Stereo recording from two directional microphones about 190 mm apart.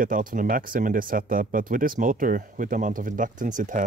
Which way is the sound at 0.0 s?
45° right (ahead or behind).